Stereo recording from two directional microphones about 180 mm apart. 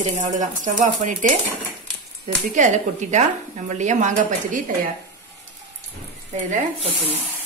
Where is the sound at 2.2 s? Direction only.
40° right (ahead or behind).